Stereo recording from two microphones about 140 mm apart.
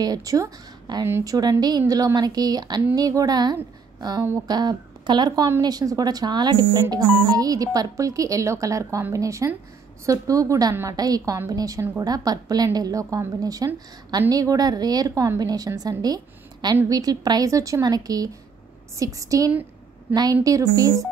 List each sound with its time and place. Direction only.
0.0 s a woman's voice: 25° right (ahead or behind)